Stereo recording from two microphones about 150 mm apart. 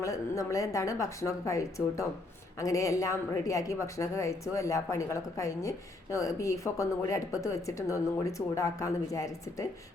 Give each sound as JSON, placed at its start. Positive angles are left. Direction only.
{"t": 0.0, "sound": "speech", "side_deg": 20}